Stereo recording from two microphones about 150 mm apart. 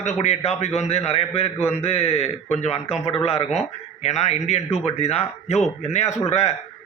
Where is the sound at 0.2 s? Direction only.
45° left (ahead or behind).